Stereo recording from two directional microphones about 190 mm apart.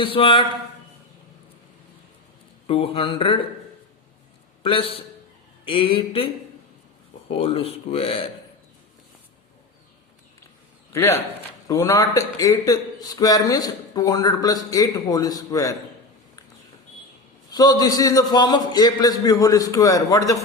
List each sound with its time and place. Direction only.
0.0 s a man's voice: 30° left (ahead or behind)
2.6 s a man's voice: 30° left (ahead or behind)
4.6 s a man's voice: 30° left (ahead or behind)
10.9 s a man's voice: 15° left (ahead or behind)
17.5 s a man's voice: 20° left (ahead or behind)